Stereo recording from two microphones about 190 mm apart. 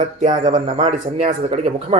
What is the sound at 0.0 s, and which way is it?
A man's voice, 40° right (ahead or behind).